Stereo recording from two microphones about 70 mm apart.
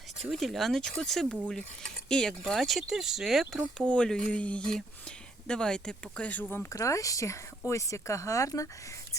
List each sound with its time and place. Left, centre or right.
0.2 s speech: centre
3.8 s speech: centre
6.7 s speech: left